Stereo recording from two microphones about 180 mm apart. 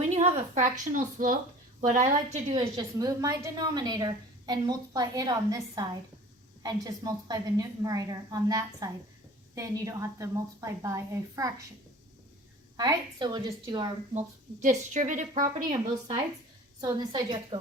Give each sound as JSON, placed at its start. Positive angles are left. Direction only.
{"t": 0.1, "sound": "a woman's voice", "side_deg": -40}
{"t": 2.7, "sound": "a woman's voice", "side_deg": -20}
{"t": 12.7, "sound": "a woman's voice", "side_deg": -25}
{"t": 14.1, "sound": "a woman's voice", "side_deg": -40}
{"t": 16.8, "sound": "a woman's voice", "side_deg": -20}